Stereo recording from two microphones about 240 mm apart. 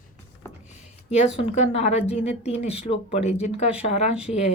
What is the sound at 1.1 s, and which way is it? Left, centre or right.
Speech, left.